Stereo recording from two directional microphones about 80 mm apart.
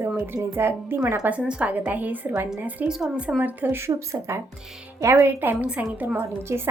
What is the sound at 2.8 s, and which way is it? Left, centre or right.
A woman's voice, centre.